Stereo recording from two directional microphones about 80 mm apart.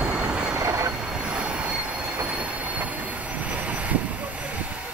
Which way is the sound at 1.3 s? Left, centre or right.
Centre.